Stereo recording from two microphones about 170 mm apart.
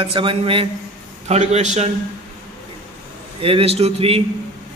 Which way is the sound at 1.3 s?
40° right (ahead or behind).